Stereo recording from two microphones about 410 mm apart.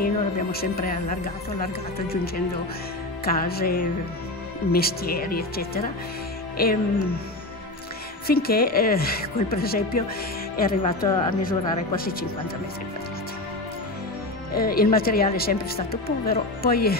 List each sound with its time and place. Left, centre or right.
0.0 s speech: left
8.3 s speech: left
14.5 s speech: left